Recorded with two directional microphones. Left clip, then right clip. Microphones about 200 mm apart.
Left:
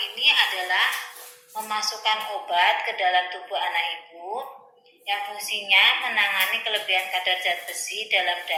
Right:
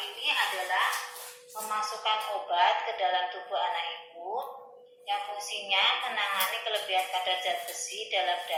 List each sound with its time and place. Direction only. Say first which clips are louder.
0.2 s a sound: left 8 dB; 40° left (ahead or behind)
1.7 s a woman's voice: left 5 dB; 40° left (ahead or behind)
5.0 s a woman's voice: left 5 dB; 40° left (ahead or behind)